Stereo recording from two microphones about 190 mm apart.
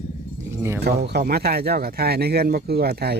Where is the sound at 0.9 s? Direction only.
60° right (ahead or behind).